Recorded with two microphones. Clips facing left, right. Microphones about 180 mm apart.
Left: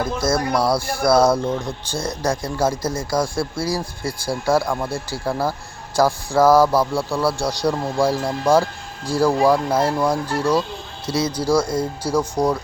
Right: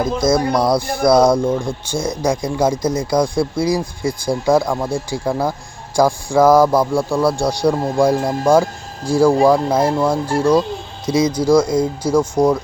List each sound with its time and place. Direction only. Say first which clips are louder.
0.0 s speech: right 5 dB; 15° right (ahead or behind)
6.4 s speech: right 2 dB; 10° left (ahead or behind)
6.9 s speech: right 4 dB; 15° right (ahead or behind)
8.1 s speech: right 5 dB; 45° right (ahead or behind)
9.0 s speech: right 4 dB; 15° right (ahead or behind)
11.3 s speech: right 5 dB; 10° left (ahead or behind)
12.4 s speech: right 5 dB; 10° right (ahead or behind)